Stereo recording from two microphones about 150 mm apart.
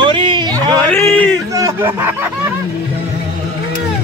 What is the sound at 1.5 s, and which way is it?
Speech, 20° right (ahead or behind).